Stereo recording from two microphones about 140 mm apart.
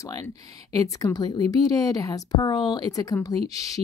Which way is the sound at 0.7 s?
25° left (ahead or behind).